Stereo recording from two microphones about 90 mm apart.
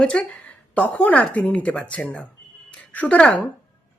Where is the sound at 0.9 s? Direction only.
15° left (ahead or behind).